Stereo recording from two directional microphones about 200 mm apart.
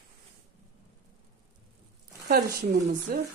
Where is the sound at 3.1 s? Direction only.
45° right (ahead or behind).